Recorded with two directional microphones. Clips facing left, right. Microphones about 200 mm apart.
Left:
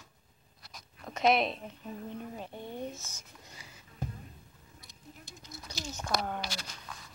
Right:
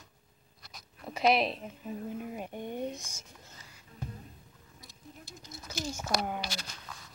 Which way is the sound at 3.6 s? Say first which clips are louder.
Left 2 dB; 10° left (ahead or behind).